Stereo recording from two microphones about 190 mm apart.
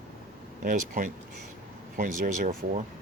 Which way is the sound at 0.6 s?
45° right (ahead or behind).